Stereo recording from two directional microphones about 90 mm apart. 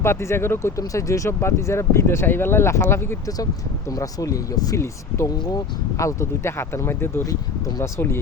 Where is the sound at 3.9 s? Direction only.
40° left (ahead or behind).